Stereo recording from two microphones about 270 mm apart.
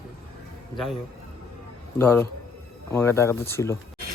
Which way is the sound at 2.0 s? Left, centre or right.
Centre.